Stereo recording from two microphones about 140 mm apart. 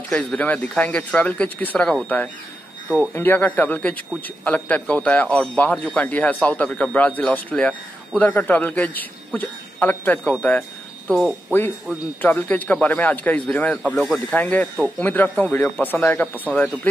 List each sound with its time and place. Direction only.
0.1 s a man's voice: 10° left (ahead or behind)
11.1 s speech: centre (ahead or behind)
12.2 s a man's voice: 10° left (ahead or behind)